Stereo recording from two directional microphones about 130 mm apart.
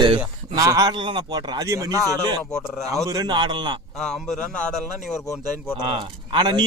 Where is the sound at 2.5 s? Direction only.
5° left (ahead or behind).